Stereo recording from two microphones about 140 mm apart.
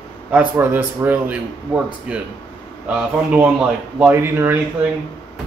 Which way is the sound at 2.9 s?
5° right (ahead or behind).